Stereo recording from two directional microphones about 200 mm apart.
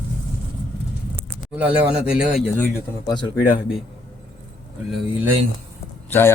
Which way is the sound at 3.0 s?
20° left (ahead or behind).